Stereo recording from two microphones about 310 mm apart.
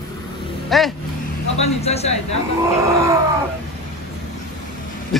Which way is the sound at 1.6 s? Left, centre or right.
Centre.